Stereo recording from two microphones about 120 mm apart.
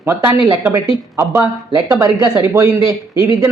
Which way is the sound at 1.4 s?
15° right (ahead or behind).